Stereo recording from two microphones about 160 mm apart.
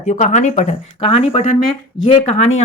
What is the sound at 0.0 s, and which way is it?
A woman's voice, 45° left (ahead or behind).